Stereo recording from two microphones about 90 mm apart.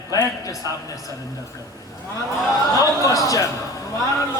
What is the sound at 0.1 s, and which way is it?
Speech, 40° left (ahead or behind).